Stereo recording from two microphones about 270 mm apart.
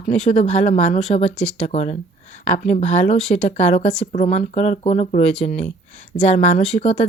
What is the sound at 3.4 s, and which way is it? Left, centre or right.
Speech, left.